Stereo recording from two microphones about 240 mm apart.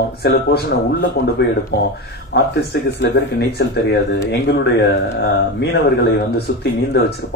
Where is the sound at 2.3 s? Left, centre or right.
Left.